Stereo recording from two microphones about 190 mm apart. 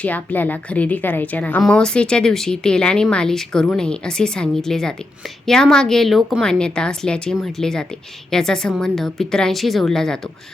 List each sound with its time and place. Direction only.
0.0 s a woman's voice: 10° left (ahead or behind)